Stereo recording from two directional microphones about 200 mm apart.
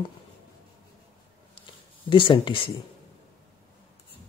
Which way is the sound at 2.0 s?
25° left (ahead or behind).